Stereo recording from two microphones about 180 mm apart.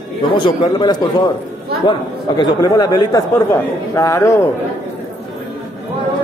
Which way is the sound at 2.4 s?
20° left (ahead or behind).